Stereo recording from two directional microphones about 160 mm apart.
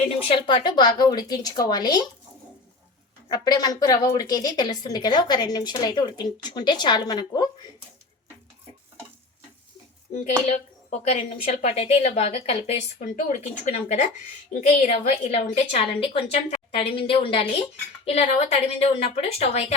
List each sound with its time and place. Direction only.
0.2 s a woman's voice: 35° left (ahead or behind)
3.2 s a woman's voice: 25° left (ahead or behind)
10.2 s a woman's voice: 40° left (ahead or behind)